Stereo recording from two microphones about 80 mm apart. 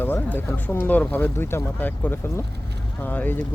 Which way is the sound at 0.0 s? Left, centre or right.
Left.